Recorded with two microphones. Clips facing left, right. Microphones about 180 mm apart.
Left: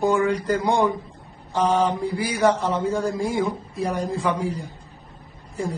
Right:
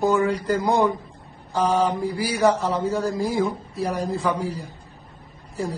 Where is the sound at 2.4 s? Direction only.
Centre (ahead or behind).